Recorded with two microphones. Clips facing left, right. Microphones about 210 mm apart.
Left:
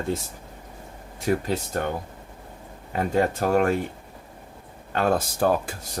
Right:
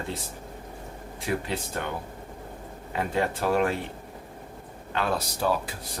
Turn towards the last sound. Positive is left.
turn(degrees=50)  # may be behind; listen again after turning